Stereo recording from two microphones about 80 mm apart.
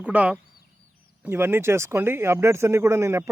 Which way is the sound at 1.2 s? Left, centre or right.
Right.